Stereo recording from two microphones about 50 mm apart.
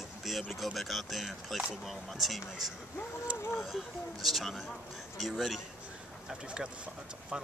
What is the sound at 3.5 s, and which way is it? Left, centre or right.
Speech, centre.